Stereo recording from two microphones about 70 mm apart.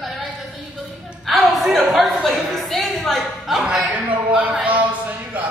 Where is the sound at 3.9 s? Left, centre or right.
Right.